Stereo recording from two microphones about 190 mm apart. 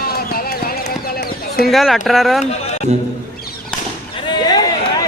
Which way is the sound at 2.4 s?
35° left (ahead or behind).